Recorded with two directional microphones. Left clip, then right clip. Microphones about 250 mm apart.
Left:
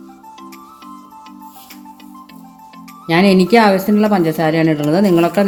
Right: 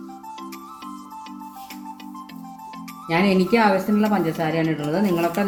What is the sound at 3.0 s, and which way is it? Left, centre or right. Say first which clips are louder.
Speech: left 7 dB; left.